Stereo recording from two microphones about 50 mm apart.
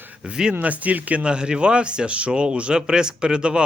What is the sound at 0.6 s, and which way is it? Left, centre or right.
Speech, right.